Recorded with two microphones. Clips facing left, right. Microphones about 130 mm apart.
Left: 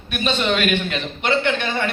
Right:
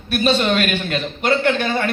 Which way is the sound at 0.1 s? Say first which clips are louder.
Right 5 dB; 40° right (ahead or behind).